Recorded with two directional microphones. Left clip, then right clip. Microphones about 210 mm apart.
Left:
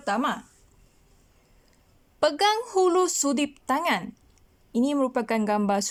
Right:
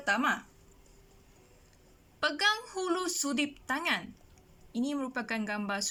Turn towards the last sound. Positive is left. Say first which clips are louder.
# left 10 dB
turn(degrees=35)  # may be behind; listen again after turning